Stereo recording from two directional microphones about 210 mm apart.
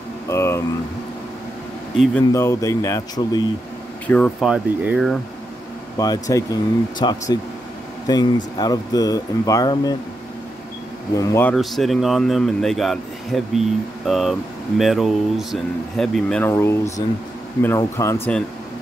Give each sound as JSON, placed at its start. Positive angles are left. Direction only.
{"t": 0.3, "sound": "air conditioning", "side_deg": 15}
{"t": 2.3, "sound": "speech", "side_deg": 15}
{"t": 4.1, "sound": "speech", "side_deg": 5}
{"t": 5.9, "sound": "speech", "side_deg": 15}
{"t": 11.1, "sound": "speech", "side_deg": 15}
{"t": 11.5, "sound": "speech", "side_deg": 0}